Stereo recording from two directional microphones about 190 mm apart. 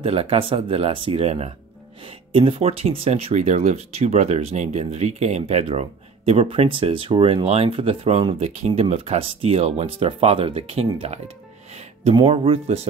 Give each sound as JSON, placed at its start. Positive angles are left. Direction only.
{"t": 0.0, "sound": "speech", "side_deg": -30}